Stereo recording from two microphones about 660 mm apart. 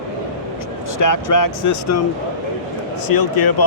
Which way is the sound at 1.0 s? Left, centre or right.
Left.